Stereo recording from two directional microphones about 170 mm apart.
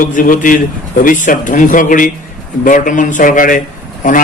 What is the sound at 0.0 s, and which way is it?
A man's voice, 50° left (ahead or behind).